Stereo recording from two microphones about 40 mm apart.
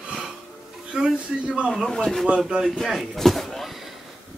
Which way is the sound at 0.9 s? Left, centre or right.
Right.